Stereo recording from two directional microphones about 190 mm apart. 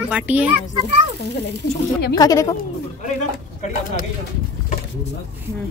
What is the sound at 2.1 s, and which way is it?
Speech, 20° left (ahead or behind).